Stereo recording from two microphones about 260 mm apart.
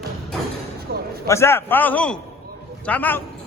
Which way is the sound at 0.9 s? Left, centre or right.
Right.